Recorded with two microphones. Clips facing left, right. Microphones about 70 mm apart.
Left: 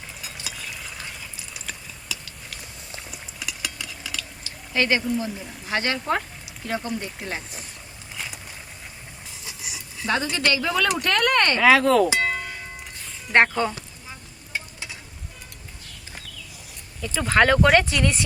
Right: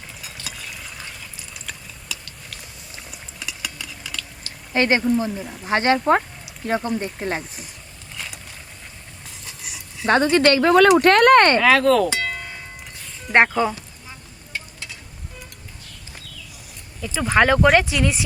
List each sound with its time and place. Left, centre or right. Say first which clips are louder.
0.4 s stir: even; centre
4.7 s speech: right 4 dB; right
8.1 s vehicle: even; centre
9.4 s a sound: left 1 dB; centre
10.1 s speech: right 8 dB; right
11.6 s speech: right 1 dB; centre
13.3 s speech: right 2 dB; centre
14.5 s frying: left 1 dB; centre
17.2 s speech: right 1 dB; centre